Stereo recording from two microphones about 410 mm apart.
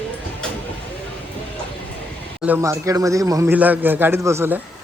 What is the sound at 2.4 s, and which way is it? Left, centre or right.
A man's voice, centre.